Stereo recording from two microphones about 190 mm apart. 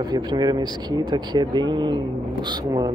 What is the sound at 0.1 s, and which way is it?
Speech, 20° right (ahead or behind).